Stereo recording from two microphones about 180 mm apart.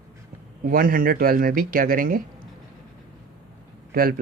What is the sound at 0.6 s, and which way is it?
Speech, 50° right (ahead or behind).